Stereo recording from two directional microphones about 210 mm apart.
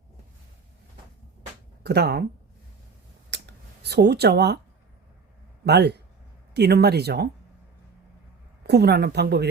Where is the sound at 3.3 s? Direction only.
55° right (ahead or behind).